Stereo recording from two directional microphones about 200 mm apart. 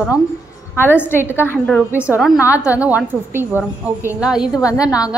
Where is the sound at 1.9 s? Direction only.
5° right (ahead or behind).